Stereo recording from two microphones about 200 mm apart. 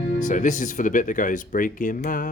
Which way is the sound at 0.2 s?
40° left (ahead or behind).